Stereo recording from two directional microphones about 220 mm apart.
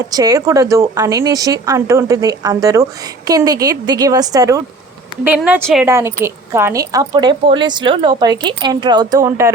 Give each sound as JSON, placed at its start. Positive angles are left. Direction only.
{"t": 0.1, "sound": "a woman's voice", "side_deg": -15}
{"t": 5.4, "sound": "a woman's voice", "side_deg": 0}